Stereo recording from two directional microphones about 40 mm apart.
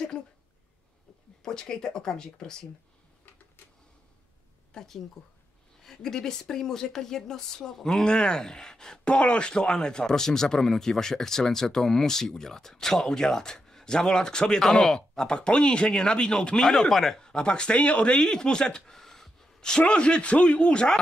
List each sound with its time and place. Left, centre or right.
1.4 s speech: centre
4.7 s speech: centre
9.0 s speech: left
9.7 s speech: centre
16.6 s speech: centre
17.2 s speech: left
18.2 s a sound: centre
19.8 s speech: left